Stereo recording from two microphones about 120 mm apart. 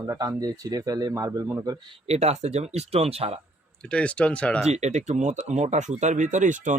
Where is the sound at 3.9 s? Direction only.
10° left (ahead or behind).